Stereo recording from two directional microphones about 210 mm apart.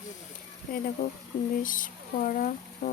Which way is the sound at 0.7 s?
45° left (ahead or behind).